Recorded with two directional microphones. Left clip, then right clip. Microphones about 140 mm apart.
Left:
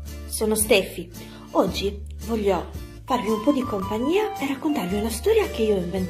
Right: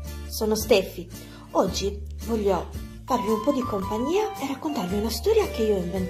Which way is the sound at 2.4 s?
5° right (ahead or behind).